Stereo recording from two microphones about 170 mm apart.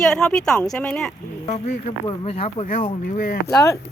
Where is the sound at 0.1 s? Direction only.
5° left (ahead or behind).